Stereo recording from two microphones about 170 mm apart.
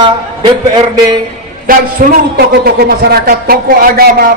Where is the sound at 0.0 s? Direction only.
25° right (ahead or behind).